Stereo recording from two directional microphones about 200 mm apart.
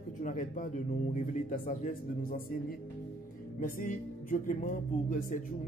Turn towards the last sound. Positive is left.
turn(degrees=40)  # may be behind; listen again after turning